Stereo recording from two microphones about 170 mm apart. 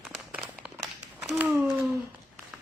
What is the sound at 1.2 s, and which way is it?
Speech, 10° right (ahead or behind).